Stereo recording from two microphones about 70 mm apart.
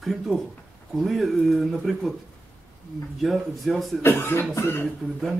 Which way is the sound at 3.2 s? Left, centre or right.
Centre.